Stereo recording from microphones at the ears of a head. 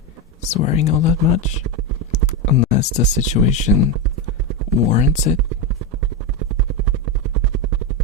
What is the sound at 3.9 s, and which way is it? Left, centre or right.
Clip-clop, right.